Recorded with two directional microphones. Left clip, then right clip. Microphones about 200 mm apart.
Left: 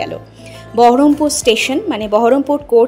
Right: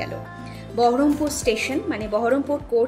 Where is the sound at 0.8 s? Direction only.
35° left (ahead or behind).